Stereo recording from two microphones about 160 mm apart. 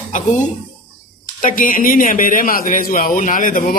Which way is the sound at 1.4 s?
60° left (ahead or behind).